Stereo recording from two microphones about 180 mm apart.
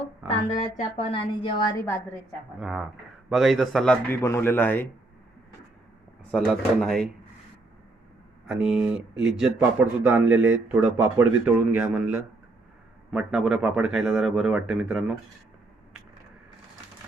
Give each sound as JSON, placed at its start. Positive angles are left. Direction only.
{"t": 0.3, "sound": "a woman's voice", "side_deg": 35}
{"t": 2.6, "sound": "a man's voice", "side_deg": 0}
{"t": 4.1, "sound": "speech", "side_deg": 15}
{"t": 6.3, "sound": "a man's voice", "side_deg": 0}
{"t": 8.4, "sound": "a man's voice", "side_deg": -5}